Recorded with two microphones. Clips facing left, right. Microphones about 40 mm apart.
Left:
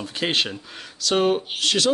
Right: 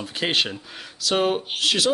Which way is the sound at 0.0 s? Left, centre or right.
Centre.